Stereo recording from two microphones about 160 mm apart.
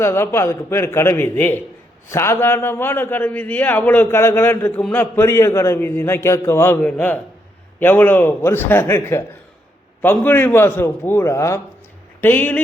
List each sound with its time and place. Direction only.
0.0 s a man's voice: 15° left (ahead or behind)